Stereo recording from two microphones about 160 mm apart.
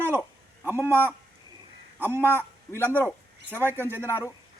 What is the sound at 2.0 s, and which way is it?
Speech, 15° left (ahead or behind).